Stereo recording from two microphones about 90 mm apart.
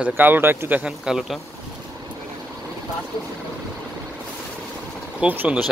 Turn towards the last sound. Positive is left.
turn(degrees=-15)  # may be behind; listen again after turning